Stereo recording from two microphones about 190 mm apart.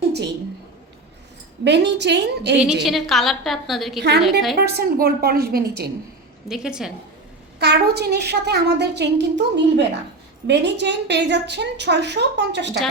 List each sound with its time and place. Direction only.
1.6 s a woman's voice: 65° right (ahead or behind)
2.8 s a woman's voice: centre (ahead or behind)
4.6 s a woman's voice: 55° right (ahead or behind)
6.5 s a woman's voice: 5° right (ahead or behind)
7.6 s a woman's voice: 60° right (ahead or behind)